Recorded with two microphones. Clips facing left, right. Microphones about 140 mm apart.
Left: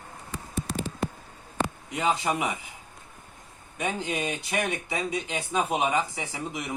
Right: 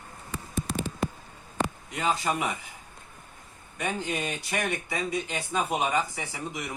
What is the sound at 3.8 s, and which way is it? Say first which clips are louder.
Speech: left 1 dB; 15° left (ahead or behind).